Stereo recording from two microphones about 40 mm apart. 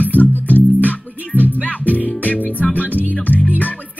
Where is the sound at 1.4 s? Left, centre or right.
Left.